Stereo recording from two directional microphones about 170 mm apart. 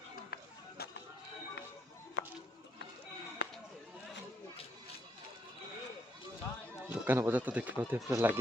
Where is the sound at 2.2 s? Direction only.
90° left.